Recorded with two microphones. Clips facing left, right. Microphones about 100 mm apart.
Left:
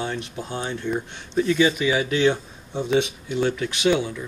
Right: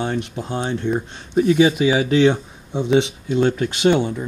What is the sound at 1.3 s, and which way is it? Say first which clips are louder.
Speech: right 5 dB; 55° right (ahead or behind).